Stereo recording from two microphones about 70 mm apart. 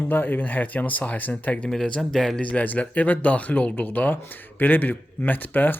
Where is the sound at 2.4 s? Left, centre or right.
Left.